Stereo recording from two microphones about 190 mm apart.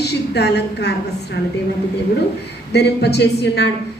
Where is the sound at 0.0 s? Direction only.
60° left (ahead or behind).